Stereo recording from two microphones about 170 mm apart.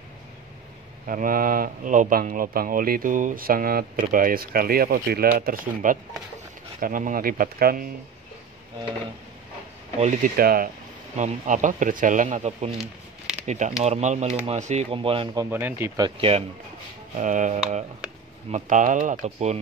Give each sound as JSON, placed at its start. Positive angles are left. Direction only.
{"t": 1.0, "sound": "speech", "side_deg": -50}
{"t": 9.9, "sound": "speech", "side_deg": -45}
{"t": 10.3, "sound": "speech", "side_deg": -60}
{"t": 11.1, "sound": "speech", "side_deg": -45}
{"t": 15.5, "sound": "speech", "side_deg": -10}
{"t": 16.0, "sound": "speech", "side_deg": -35}
{"t": 17.2, "sound": "speech", "side_deg": -45}